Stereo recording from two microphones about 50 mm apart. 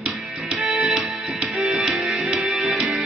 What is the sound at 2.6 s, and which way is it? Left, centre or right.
Music, centre.